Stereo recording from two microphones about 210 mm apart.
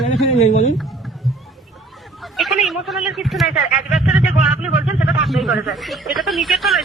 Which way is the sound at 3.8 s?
Centre (ahead or behind).